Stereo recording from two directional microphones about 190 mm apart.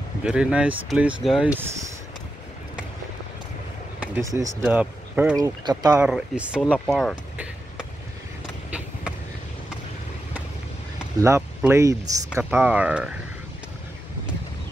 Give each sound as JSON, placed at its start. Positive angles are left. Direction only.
{"t": 0.2, "sound": "speech", "side_deg": -5}
{"t": 4.0, "sound": "speech", "side_deg": -10}
{"t": 4.6, "sound": "speech", "side_deg": -5}
{"t": 5.3, "sound": "speech", "side_deg": -20}
{"t": 6.0, "sound": "speech", "side_deg": -5}
{"t": 11.2, "sound": "speech", "side_deg": -15}